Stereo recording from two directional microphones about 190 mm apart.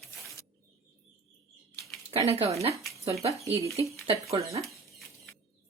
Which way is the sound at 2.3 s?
35° right (ahead or behind).